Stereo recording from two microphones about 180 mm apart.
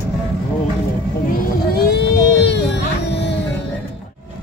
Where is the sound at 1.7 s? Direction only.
60° left (ahead or behind).